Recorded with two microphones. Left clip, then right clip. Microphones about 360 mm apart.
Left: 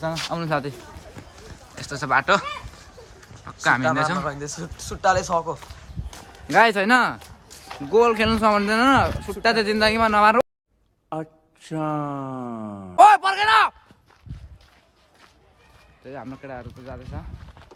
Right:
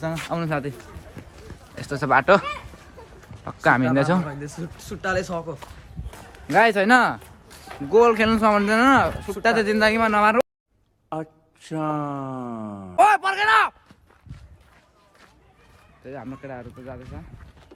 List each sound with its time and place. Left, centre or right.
0.0 s speech: centre
1.2 s a sound: left
1.7 s speech: centre
4.3 s speech: centre
11.1 s a sound: centre
16.0 s speech: centre